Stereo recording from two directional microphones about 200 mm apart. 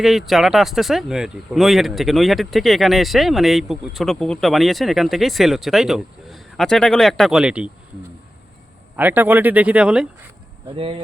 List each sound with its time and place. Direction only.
0.0 s speech: centre (ahead or behind)
9.0 s speech: 10° right (ahead or behind)
10.8 s speech: 30° right (ahead or behind)